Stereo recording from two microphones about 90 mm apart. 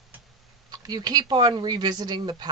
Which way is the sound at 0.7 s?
50° right (ahead or behind).